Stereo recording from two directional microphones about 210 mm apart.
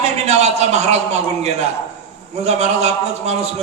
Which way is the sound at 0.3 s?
30° right (ahead or behind).